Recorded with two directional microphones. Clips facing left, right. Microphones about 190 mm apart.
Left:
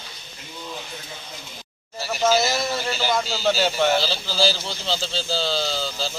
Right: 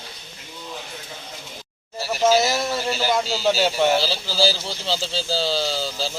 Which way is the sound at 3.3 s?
5° right (ahead or behind).